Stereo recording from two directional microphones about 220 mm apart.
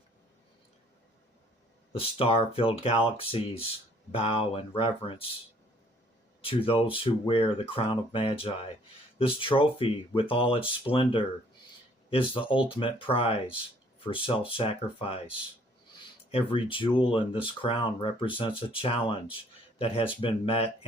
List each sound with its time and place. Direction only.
1.9 s speech: 25° left (ahead or behind)
6.4 s speech: 25° left (ahead or behind)
16.3 s speech: 25° left (ahead or behind)